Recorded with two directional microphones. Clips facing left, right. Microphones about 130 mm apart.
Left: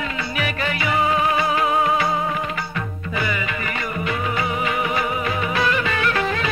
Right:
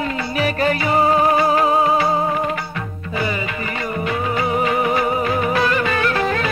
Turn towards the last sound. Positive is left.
turn(degrees=-40)  # may be behind; listen again after turning